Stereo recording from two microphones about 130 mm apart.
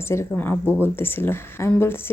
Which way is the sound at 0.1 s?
20° left (ahead or behind).